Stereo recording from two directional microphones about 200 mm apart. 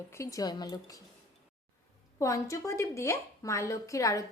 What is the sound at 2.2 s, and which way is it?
A woman's voice, 15° left (ahead or behind).